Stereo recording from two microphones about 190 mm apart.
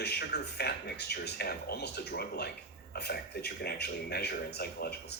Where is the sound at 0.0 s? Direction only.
60° left (ahead or behind).